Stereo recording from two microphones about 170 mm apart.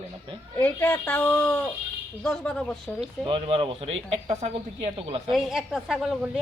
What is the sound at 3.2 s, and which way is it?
A man's voice, 35° right (ahead or behind).